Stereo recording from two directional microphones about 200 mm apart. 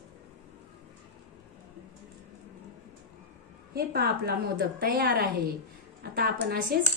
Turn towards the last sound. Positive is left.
turn(degrees=-50)  # may be behind; listen again after turning